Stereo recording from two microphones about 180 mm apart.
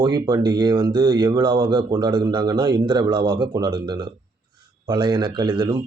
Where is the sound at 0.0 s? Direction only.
20° right (ahead or behind).